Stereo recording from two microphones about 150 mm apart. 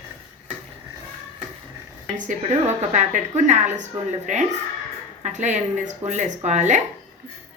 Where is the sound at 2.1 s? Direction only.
55° right (ahead or behind).